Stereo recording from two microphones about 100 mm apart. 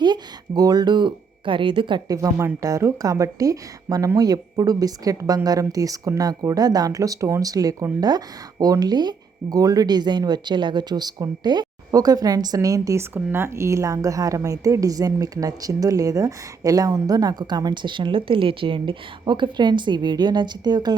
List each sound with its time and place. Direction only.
0.0 s speech: 45° right (ahead or behind)
2.0 s a woman's voice: 35° right (ahead or behind)